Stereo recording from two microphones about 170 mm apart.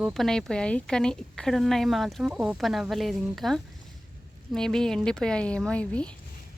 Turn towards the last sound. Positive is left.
turn(degrees=5)  # may be behind; listen again after turning